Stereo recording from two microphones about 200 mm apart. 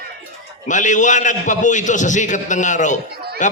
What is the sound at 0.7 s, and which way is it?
A man's voice, 40° left (ahead or behind).